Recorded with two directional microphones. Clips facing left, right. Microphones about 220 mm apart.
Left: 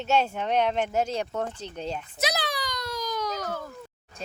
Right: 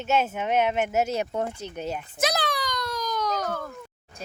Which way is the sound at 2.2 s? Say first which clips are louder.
Right 3 dB; 50° right (ahead or behind).